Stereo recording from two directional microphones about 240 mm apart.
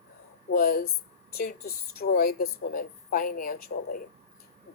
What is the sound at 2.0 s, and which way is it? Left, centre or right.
A woman's voice, left.